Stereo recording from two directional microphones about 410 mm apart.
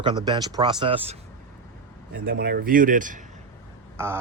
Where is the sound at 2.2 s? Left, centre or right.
Right.